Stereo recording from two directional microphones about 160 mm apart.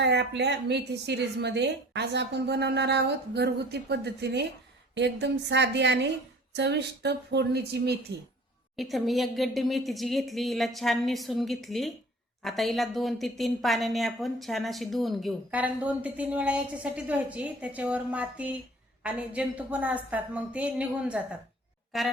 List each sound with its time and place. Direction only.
0.0 s a woman's voice: 90° right
8.7 s speech: centre (ahead or behind)
15.4 s a woman's voice: 10° right (ahead or behind)